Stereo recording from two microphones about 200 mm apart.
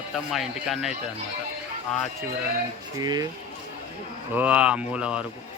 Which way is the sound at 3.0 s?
20° right (ahead or behind).